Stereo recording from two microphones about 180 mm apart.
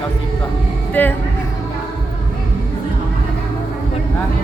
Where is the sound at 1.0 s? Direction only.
10° left (ahead or behind).